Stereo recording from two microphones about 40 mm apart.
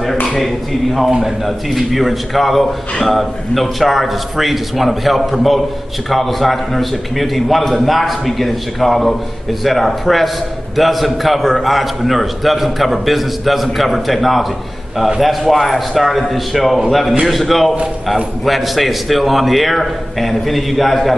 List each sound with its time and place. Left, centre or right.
1.2 s a man's voice: centre